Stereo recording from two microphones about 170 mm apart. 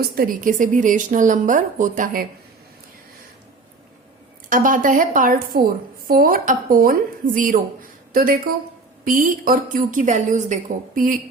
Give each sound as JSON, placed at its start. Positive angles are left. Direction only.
{"t": 0.2, "sound": "a woman's voice", "side_deg": -55}
{"t": 4.4, "sound": "a woman's voice", "side_deg": -55}